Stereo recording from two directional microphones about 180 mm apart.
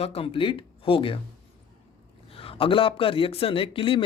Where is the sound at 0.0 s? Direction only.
35° left (ahead or behind).